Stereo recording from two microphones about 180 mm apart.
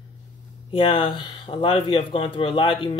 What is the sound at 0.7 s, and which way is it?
Speech, 25° left (ahead or behind).